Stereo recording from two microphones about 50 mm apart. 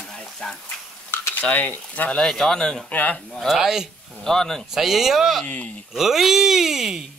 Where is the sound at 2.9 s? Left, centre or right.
Left.